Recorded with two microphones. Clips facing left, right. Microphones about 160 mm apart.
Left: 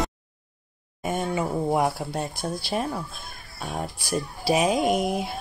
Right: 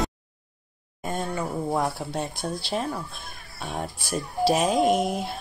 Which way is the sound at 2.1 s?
5° left (ahead or behind).